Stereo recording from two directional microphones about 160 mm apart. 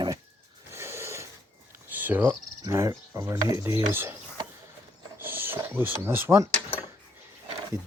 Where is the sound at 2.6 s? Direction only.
20° right (ahead or behind).